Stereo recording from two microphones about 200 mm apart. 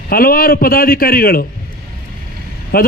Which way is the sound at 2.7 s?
50° left (ahead or behind).